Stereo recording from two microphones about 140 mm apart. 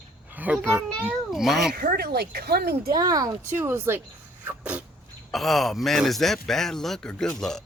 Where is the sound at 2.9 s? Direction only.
25° right (ahead or behind).